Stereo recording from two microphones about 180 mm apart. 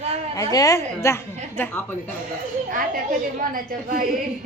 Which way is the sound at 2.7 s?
50° right (ahead or behind).